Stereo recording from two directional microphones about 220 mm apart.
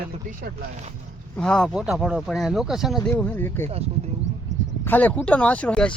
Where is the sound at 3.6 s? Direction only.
25° right (ahead or behind).